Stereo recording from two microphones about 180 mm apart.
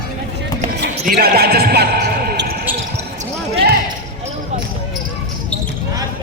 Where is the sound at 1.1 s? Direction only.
60° right (ahead or behind).